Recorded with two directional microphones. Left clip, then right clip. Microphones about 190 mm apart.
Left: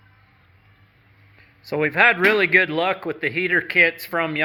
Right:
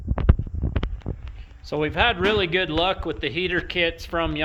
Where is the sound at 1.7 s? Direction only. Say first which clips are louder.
Left 5 dB; 10° left (ahead or behind).